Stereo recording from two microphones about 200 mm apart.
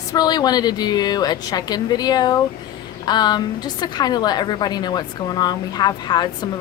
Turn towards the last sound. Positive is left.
turn(degrees=20)  # may be behind; listen again after turning